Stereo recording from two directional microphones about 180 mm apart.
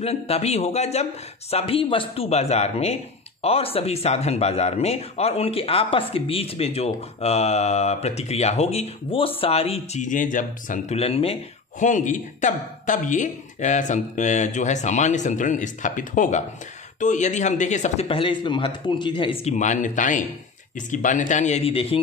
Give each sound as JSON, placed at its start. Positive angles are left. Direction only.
{"t": 0.0, "sound": "a man's voice", "side_deg": 35}
{"t": 11.8, "sound": "a man's voice", "side_deg": 45}
{"t": 19.4, "sound": "a man's voice", "side_deg": 45}